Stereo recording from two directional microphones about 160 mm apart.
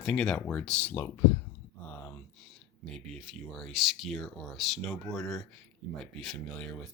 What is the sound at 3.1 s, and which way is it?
Speech, centre (ahead or behind).